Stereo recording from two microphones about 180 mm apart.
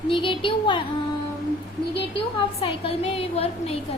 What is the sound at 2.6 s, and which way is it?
A woman's voice, 30° left (ahead or behind).